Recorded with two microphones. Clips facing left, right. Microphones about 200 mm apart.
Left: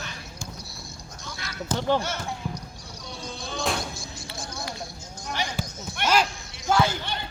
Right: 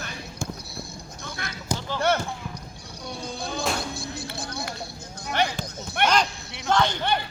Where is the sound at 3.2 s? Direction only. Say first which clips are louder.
Right 2 dB; 60° right (ahead or behind).